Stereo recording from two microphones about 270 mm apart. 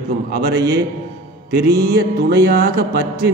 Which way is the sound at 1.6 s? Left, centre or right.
Right.